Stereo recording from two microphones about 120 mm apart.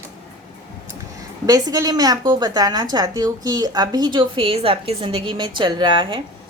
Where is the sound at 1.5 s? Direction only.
30° right (ahead or behind).